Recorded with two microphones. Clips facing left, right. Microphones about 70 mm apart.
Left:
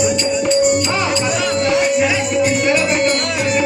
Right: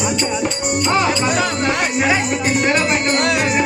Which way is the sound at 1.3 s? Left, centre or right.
Right.